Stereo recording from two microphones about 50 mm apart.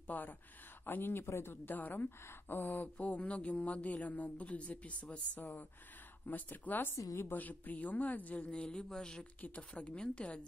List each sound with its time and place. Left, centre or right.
0.0 s speech: left
1.7 s speech: left
6.2 s speech: left; by 9.2 s centre
9.4 s speech: left